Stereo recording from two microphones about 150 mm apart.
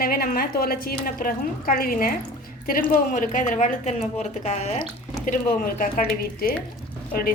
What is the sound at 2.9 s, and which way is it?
Speech, 60° left (ahead or behind).